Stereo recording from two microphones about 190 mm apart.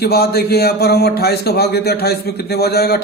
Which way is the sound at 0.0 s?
55° left (ahead or behind).